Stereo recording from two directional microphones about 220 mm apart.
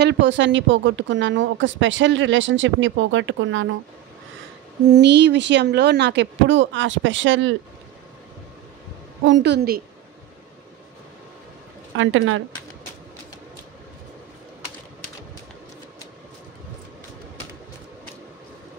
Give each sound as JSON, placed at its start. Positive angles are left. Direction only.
{"t": 0.0, "sound": "speech", "side_deg": -55}
{"t": 4.8, "sound": "speech", "side_deg": -50}
{"t": 9.2, "sound": "speech", "side_deg": -55}
{"t": 12.0, "sound": "speech", "side_deg": -65}